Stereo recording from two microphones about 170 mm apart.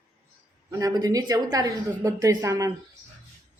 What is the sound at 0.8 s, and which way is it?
A woman's voice, 20° right (ahead or behind).